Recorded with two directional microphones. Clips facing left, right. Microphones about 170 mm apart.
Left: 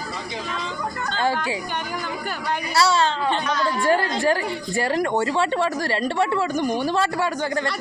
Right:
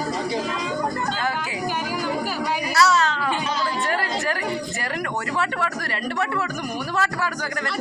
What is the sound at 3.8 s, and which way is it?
Chatter, 30° left (ahead or behind).